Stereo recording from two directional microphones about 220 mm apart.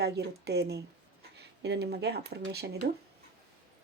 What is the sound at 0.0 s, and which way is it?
Speech, 50° right (ahead or behind).